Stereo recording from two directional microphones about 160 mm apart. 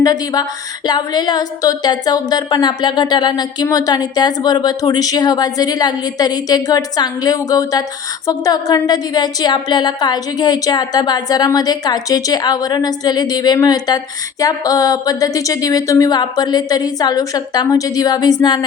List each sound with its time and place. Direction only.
0.0 s a woman's voice: 25° left (ahead or behind)